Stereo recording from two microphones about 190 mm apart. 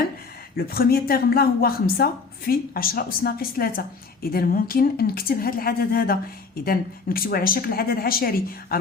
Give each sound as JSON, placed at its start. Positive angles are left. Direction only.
{"t": 0.5, "sound": "a woman's voice", "side_deg": 50}